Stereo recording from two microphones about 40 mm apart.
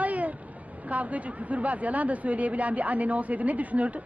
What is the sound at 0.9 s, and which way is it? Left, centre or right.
Speech, right.